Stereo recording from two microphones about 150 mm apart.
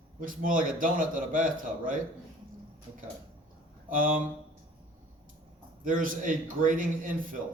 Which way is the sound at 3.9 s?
65° right (ahead or behind).